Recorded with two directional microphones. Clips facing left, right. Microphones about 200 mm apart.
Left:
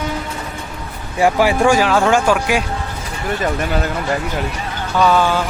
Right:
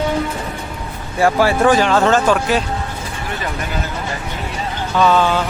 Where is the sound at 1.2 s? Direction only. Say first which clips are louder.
Even; 15° left (ahead or behind).